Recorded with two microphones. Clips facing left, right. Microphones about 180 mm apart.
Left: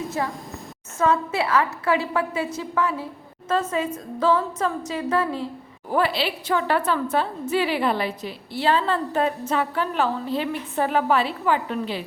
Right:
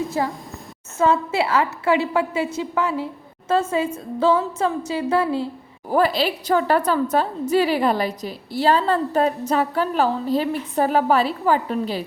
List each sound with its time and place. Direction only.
0.2 s a woman's voice: 30° right (ahead or behind)
5.9 s a woman's voice: 40° right (ahead or behind)